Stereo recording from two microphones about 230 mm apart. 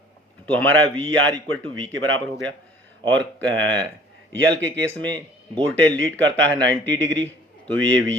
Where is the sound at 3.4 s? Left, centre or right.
Right.